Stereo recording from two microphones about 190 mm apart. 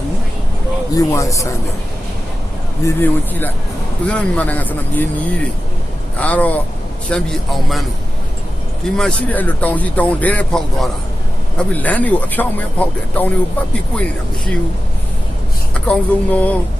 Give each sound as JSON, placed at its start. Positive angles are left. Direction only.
{"t": 0.9, "sound": "speech", "side_deg": 15}
{"t": 2.8, "sound": "speech", "side_deg": 10}
{"t": 6.1, "sound": "speech", "side_deg": 10}
{"t": 9.0, "sound": "speech", "side_deg": 5}
{"t": 15.7, "sound": "speech", "side_deg": 5}